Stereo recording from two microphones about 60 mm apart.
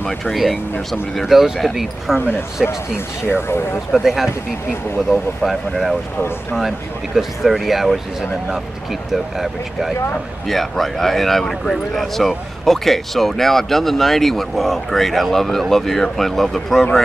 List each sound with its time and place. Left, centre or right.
0.2 s speech: centre
3.9 s speech: centre
7.2 s speech: centre